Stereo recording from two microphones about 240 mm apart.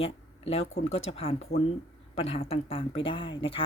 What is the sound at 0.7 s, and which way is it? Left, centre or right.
Speech, left.